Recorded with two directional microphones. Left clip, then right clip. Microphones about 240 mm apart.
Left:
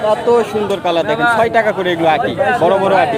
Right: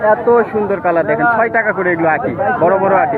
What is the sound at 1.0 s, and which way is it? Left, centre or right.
A man's voice, left.